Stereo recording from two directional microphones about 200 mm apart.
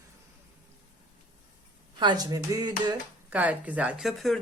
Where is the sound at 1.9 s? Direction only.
20° right (ahead or behind).